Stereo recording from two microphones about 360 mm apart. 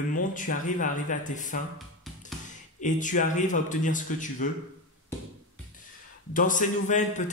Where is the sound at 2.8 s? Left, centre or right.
Left.